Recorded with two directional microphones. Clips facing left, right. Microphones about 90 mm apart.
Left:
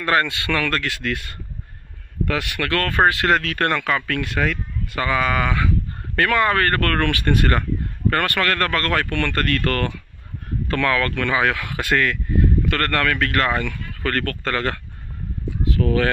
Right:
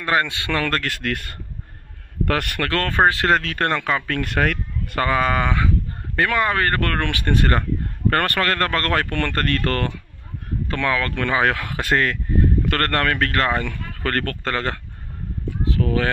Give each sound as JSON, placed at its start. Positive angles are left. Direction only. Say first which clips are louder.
{"t": 0.0, "sound": "speech", "louder": "left 1 dB", "side_deg": -20}
{"t": 2.6, "sound": "speech", "louder": "left 1 dB", "side_deg": -30}
{"t": 4.2, "sound": "speech", "louder": "right 1 dB", "side_deg": -50}
{"t": 6.1, "sound": "speech", "louder": "left 2 dB", "side_deg": -15}
{"t": 8.1, "sound": "speech", "louder": "even", "side_deg": -40}